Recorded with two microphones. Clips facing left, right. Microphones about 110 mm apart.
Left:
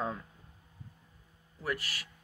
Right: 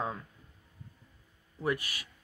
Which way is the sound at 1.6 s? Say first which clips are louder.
Right 4 dB; 20° right (ahead or behind).